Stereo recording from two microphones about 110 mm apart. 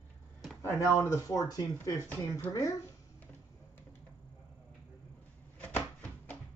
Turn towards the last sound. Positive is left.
turn(degrees=15)  # may be behind; listen again after turning